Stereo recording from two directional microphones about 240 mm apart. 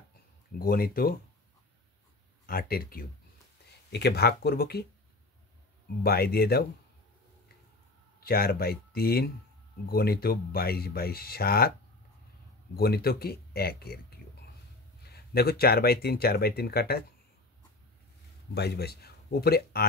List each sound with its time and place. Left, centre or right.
0.6 s speech: left
2.4 s speech: left
6.0 s speech: left
8.2 s speech: left
12.7 s speech: left
15.0 s speech: left
18.5 s speech: left